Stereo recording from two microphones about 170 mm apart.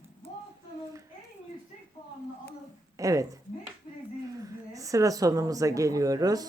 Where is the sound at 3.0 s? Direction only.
20° right (ahead or behind).